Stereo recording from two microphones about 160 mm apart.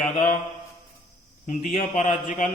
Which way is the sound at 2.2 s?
55° left (ahead or behind).